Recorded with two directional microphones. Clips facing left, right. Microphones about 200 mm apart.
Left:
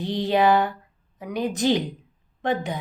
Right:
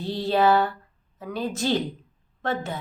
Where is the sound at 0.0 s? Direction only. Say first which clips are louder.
Left 1 dB; 15° left (ahead or behind).